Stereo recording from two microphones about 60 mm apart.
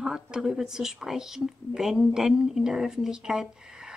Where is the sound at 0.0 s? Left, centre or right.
Centre.